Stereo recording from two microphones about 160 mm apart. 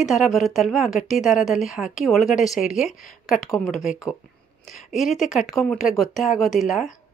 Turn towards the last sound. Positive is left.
turn(degrees=0)  # may be behind; listen again after turning